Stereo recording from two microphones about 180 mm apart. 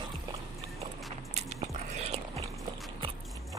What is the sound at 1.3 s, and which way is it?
Biting, 35° right (ahead or behind).